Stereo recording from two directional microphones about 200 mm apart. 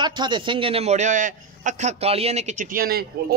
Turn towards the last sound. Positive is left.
turn(degrees=-50)  # may be behind; listen again after turning